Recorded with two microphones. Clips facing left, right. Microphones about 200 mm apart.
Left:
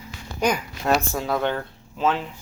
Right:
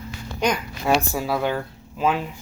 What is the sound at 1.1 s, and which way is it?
Speech, 10° right (ahead or behind).